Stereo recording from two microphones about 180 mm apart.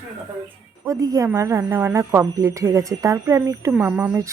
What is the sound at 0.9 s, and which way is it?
Speech, 20° right (ahead or behind).